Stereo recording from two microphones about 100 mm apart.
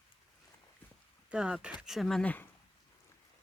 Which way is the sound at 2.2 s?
15° left (ahead or behind).